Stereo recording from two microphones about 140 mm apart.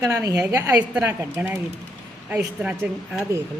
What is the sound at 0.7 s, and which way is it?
A woman's voice, 10° right (ahead or behind).